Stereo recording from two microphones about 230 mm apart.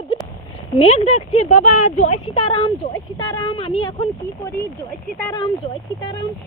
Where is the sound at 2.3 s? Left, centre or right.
Left.